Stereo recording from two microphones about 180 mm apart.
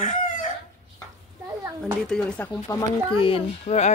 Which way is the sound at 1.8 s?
5° left (ahead or behind).